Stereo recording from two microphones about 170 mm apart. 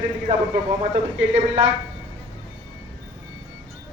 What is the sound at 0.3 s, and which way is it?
Speech, 35° right (ahead or behind).